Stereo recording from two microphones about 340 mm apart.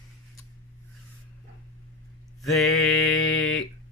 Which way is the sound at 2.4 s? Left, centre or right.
Centre.